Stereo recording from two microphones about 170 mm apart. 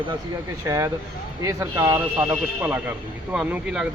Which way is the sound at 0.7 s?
20° right (ahead or behind).